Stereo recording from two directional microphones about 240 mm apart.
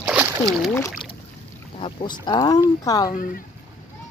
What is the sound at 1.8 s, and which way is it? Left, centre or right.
Speech, centre.